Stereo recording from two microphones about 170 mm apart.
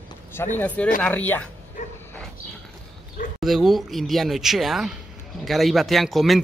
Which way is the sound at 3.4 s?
Centre (ahead or behind).